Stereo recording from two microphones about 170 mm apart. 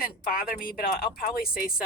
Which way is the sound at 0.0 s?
60° left (ahead or behind).